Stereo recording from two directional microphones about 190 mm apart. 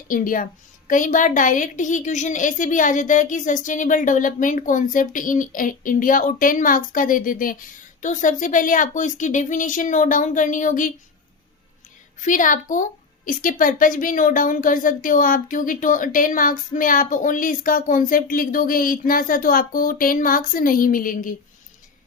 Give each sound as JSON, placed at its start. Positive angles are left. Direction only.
{"t": 0.1, "sound": "a woman's voice", "side_deg": 45}
{"t": 12.2, "sound": "a woman's voice", "side_deg": 45}